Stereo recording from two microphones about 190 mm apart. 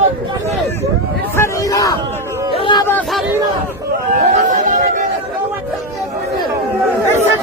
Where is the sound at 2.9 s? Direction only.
10° left (ahead or behind).